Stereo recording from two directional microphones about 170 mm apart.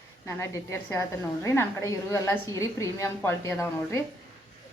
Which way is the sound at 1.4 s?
15° left (ahead or behind).